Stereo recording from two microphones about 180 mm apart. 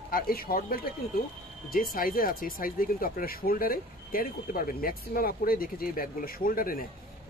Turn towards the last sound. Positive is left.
turn(degrees=50)  # may be behind; listen again after turning